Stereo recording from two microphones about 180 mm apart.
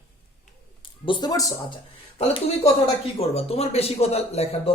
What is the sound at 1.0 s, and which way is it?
Speech, 25° left (ahead or behind).